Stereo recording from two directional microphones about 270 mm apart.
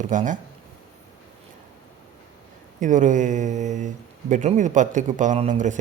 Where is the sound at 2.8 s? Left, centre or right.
Right.